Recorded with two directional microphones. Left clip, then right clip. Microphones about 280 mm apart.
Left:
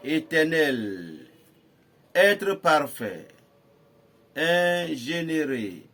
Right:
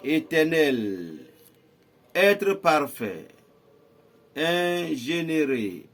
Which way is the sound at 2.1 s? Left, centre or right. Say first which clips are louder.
Even; centre.